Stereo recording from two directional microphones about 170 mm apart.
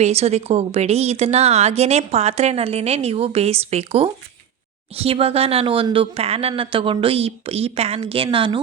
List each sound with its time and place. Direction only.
0.0 s speech: 40° right (ahead or behind)